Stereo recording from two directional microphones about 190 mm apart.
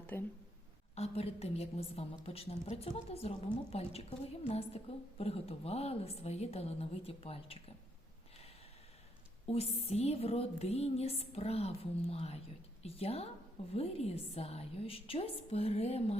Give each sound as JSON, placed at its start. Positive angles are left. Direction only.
{"t": 0.1, "sound": "speech", "side_deg": 10}
{"t": 0.9, "sound": "a woman's voice", "side_deg": 35}
{"t": 9.5, "sound": "a woman's voice", "side_deg": 35}